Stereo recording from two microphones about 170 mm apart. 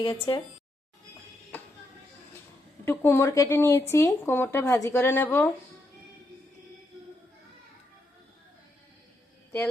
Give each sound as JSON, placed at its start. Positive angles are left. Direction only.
{"t": 0.0, "sound": "speech", "side_deg": 25}
{"t": 2.8, "sound": "speech", "side_deg": 15}